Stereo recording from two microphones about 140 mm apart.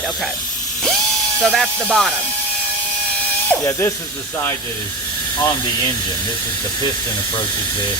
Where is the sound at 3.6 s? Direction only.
20° left (ahead or behind).